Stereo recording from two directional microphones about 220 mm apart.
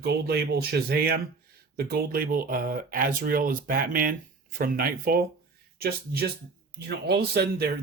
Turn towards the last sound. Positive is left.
turn(degrees=-45)  # may be behind; listen again after turning